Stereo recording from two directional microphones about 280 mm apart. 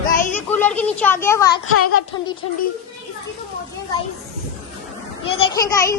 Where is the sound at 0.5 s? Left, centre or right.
Centre.